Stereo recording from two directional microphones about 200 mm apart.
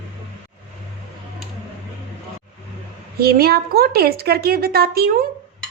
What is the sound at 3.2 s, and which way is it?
Speech, 50° right (ahead or behind).